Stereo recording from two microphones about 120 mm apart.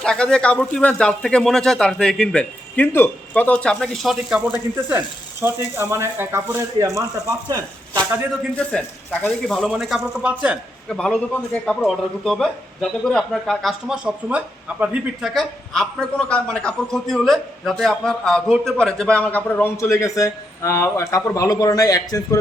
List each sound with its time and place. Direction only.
0.0 s speech: 5° left (ahead or behind)
4.4 s speech: 15° right (ahead or behind)
8.5 s a man's voice: 10° left (ahead or behind); by 10.6 s 10° right (ahead or behind)
10.8 s a man's voice: 5° left (ahead or behind); by 15.3 s 10° right (ahead or behind)
15.3 s a man's voice: 5° left (ahead or behind); by 22.4 s 30° left (ahead or behind)